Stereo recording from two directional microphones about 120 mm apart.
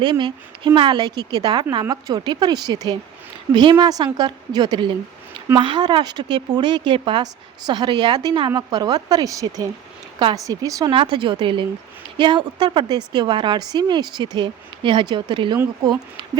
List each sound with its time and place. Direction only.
0.0 s a woman's voice: 45° right (ahead or behind)
10.9 s a woman's voice: 45° right (ahead or behind)